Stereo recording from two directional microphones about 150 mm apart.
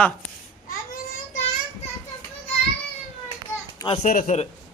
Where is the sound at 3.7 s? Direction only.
30° left (ahead or behind).